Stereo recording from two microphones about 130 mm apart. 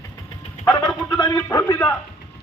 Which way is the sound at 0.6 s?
30° left (ahead or behind).